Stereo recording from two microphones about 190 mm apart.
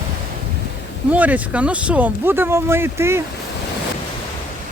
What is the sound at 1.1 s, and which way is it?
Speech, 10° right (ahead or behind).